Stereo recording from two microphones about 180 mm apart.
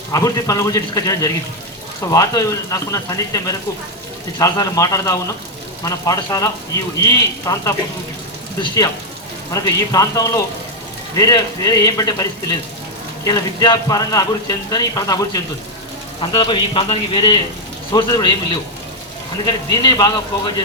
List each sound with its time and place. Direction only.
0.1 s speech: 20° left (ahead or behind)
9.5 s speech: 20° left (ahead or behind)
19.8 s speech: 20° left (ahead or behind)